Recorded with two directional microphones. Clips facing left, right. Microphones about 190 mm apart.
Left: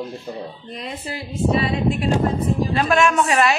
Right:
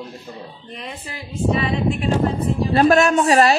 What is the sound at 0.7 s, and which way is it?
Speech, 35° left (ahead or behind).